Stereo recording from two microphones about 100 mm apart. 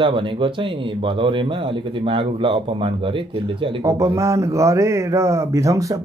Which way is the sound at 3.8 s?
35° right (ahead or behind).